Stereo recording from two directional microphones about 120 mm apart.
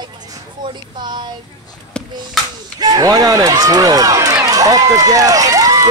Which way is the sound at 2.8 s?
30° right (ahead or behind).